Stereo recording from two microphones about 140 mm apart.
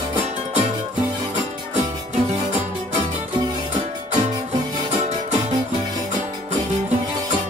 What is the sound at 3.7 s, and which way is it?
Music, 60° right (ahead or behind).